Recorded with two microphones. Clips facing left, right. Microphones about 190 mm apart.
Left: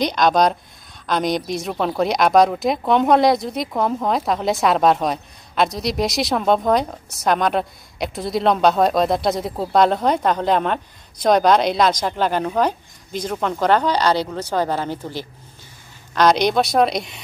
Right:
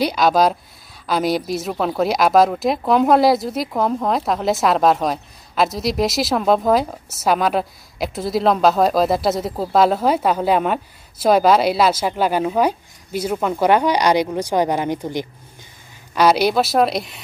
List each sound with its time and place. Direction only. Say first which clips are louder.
0.0 s speech: right 1 dB; 5° right (ahead or behind)